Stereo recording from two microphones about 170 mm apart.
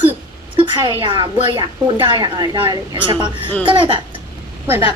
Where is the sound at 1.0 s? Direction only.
30° right (ahead or behind).